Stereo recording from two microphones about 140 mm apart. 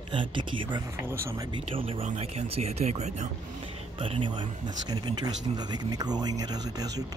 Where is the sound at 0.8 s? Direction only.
15° right (ahead or behind).